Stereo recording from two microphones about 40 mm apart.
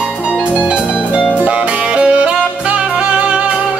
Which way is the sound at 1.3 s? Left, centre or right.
Right.